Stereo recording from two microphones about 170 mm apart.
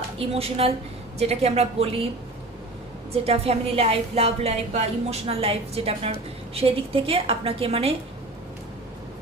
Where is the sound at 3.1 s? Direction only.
35° right (ahead or behind).